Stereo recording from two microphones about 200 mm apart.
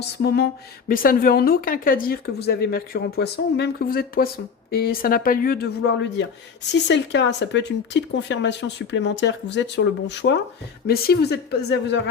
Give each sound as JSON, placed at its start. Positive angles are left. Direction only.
{"t": 0.0, "sound": "a woman's voice", "side_deg": 55}
{"t": 10.8, "sound": "a woman's voice", "side_deg": 50}